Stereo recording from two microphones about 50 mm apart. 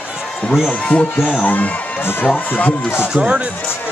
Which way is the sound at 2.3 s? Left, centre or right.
Left.